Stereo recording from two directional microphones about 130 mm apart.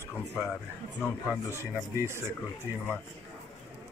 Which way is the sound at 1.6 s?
20° right (ahead or behind).